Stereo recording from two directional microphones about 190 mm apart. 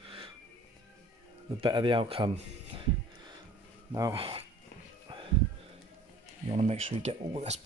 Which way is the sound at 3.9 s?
25° right (ahead or behind).